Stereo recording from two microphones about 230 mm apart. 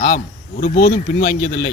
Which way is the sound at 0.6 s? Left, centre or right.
Left.